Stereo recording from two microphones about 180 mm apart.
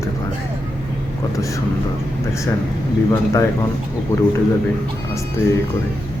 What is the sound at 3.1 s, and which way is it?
Speech, 20° left (ahead or behind).